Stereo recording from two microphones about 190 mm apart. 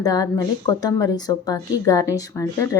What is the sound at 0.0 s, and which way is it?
Speech, 20° left (ahead or behind).